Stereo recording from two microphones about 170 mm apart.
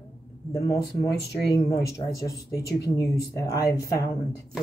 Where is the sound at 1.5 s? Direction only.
20° left (ahead or behind).